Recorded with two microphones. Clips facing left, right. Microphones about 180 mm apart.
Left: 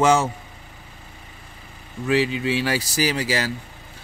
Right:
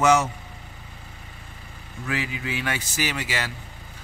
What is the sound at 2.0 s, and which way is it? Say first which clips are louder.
A man's voice: left 9 dB; 30° left (ahead or behind).